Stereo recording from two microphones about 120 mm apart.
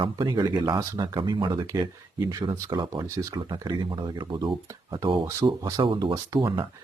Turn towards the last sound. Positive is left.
turn(degrees=-35)  # may be behind; listen again after turning